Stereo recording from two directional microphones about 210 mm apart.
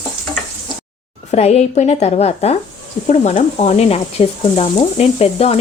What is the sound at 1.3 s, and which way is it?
A woman's voice, 30° left (ahead or behind).